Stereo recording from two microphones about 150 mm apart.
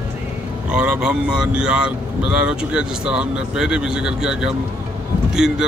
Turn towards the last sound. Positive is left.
turn(degrees=-5)  # may be behind; listen again after turning